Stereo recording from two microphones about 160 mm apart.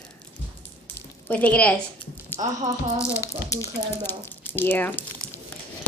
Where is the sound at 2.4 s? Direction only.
45° right (ahead or behind).